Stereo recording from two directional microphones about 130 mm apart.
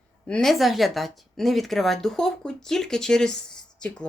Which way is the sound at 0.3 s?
5° left (ahead or behind).